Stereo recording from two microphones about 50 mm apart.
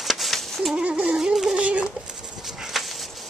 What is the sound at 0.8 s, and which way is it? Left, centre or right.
Speech, right.